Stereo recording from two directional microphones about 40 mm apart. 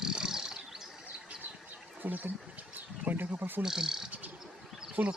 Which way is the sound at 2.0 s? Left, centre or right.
Right.